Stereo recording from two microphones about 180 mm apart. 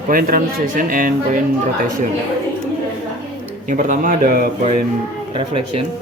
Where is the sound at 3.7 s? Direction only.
45° right (ahead or behind).